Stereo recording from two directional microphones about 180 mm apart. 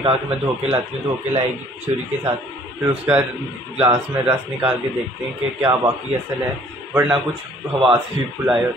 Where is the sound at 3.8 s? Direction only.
10° right (ahead or behind).